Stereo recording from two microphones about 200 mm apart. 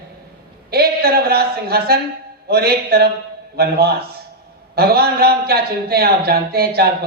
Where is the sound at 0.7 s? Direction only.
50° right (ahead or behind).